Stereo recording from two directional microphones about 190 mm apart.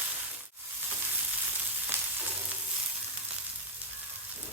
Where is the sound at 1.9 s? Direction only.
10° right (ahead or behind).